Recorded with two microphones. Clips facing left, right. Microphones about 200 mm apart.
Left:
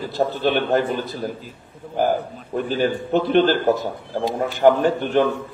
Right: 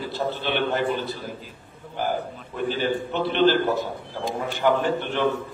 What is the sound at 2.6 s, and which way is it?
Speech, 45° left (ahead or behind).